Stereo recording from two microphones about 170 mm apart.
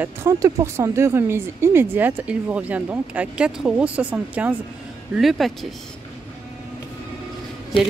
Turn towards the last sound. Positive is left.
turn(degrees=30)  # may be behind; listen again after turning